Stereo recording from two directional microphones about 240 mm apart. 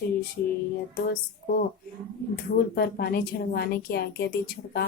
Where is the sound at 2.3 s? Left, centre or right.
Left.